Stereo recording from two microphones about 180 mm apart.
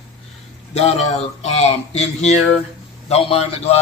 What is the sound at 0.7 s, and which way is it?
Speech, 35° left (ahead or behind).